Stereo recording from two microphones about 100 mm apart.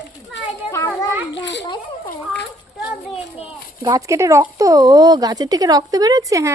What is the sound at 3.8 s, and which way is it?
Speech, 35° right (ahead or behind).